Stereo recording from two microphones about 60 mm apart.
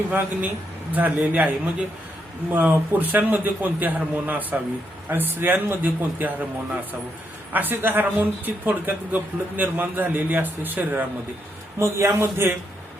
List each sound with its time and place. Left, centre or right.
0.1 s a man's voice: right
7.5 s speech: right
11.8 s a man's voice: right